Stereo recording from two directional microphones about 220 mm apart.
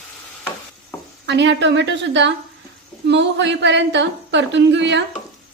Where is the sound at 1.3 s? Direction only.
55° right (ahead or behind).